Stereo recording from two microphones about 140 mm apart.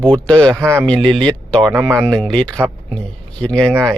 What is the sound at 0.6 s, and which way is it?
Speech, 15° right (ahead or behind).